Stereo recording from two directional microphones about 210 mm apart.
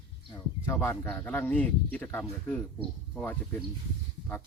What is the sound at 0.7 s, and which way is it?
Speech, 10° left (ahead or behind).